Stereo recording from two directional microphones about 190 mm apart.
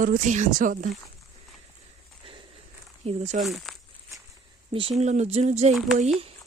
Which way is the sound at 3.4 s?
Centre (ahead or behind).